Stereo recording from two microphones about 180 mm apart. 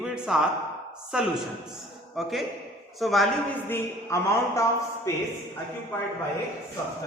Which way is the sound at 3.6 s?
15° left (ahead or behind).